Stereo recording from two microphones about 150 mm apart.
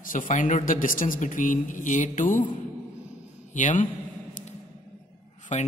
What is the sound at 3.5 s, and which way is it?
Speech, 60° left (ahead or behind).